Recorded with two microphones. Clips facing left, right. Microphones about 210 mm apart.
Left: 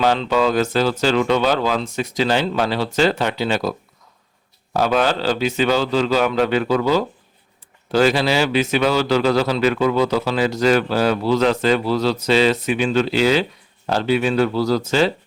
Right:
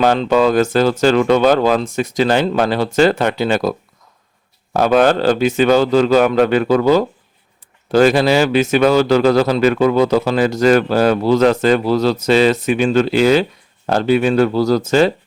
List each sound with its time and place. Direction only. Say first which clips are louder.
0.0 s a man's voice: right 4 dB; 50° right (ahead or behind)